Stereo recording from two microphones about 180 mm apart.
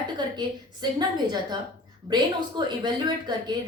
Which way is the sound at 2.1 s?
25° right (ahead or behind).